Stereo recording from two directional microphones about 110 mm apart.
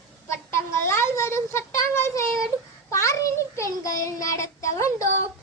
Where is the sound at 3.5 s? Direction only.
30° left (ahead or behind).